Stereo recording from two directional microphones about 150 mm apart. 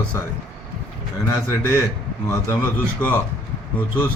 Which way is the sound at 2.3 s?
20° left (ahead or behind).